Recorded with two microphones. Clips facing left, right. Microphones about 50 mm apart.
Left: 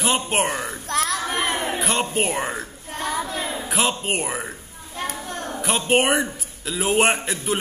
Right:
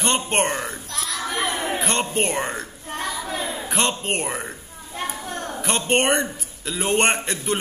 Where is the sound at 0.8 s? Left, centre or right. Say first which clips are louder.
Left 5 dB; left.